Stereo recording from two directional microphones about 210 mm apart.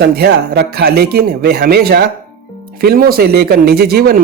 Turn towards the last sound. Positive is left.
turn(degrees=-45)  # may be behind; listen again after turning